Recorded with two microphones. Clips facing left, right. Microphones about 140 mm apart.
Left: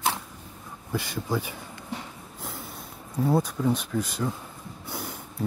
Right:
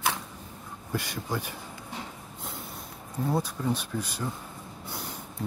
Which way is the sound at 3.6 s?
5° left (ahead or behind).